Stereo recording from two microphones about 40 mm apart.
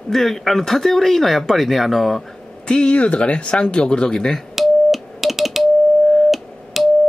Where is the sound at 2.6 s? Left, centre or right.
Centre.